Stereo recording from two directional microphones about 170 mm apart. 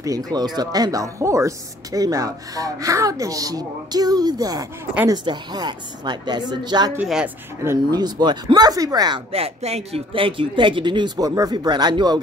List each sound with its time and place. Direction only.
0.0 s speech: 20° right (ahead or behind)
7.0 s speech: 5° right (ahead or behind)
7.6 s speech: 20° right (ahead or behind)
9.3 s speech: 35° right (ahead or behind)